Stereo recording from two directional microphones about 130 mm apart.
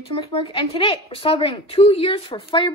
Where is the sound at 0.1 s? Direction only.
40° left (ahead or behind).